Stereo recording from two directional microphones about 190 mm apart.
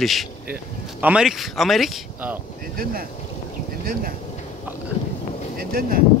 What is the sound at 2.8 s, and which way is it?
Speech, 50° right (ahead or behind).